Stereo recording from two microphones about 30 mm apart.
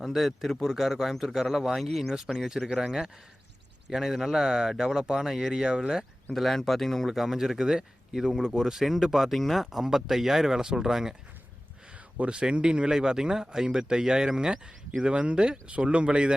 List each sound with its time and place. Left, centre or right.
0.0 s speech: centre
2.1 s speech: centre
3.9 s speech: centre
5.6 s speech: right
6.3 s speech: centre
7.1 s speech: centre
8.7 s speech: centre
12.2 s speech: right
15.1 s speech: right